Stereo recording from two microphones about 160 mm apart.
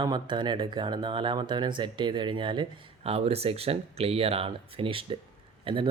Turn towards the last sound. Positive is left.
turn(degrees=-30)  # may be behind; listen again after turning